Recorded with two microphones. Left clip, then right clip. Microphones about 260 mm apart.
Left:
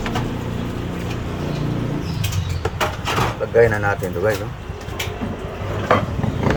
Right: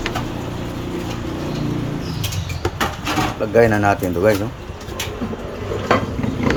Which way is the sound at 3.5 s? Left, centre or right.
Right.